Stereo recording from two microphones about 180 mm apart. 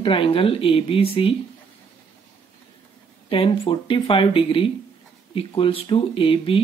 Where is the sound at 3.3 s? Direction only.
30° left (ahead or behind).